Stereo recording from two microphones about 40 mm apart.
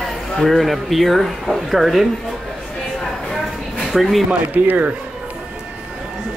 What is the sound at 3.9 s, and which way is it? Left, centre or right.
Speech, centre.